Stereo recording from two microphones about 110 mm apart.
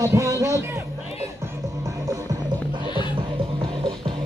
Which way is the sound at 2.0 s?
30° right (ahead or behind).